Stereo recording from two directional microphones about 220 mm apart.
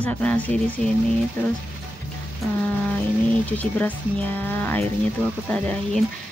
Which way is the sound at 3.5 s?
5° left (ahead or behind).